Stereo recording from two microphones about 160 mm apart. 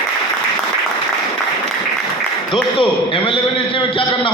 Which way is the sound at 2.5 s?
30° left (ahead or behind).